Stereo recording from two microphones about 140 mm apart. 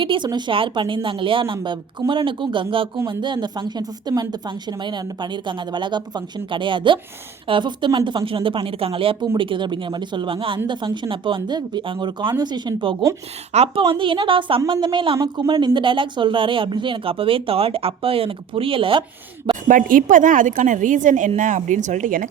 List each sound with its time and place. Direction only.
0.0 s speech: 35° right (ahead or behind)
13.5 s a woman's voice: 50° right (ahead or behind)
13.8 s speech: 35° right (ahead or behind)
19.6 s a woman's voice: 70° right (ahead or behind)